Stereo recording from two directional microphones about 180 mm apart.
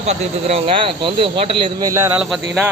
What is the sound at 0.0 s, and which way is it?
Speech, 35° right (ahead or behind).